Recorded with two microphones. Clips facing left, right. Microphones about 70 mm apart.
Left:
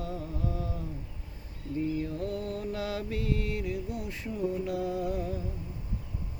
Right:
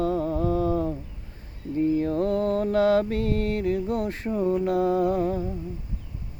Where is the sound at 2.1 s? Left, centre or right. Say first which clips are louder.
Right 11 dB; right.